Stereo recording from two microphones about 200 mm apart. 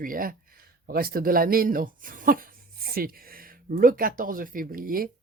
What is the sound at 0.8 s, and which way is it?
Speech, 45° right (ahead or behind).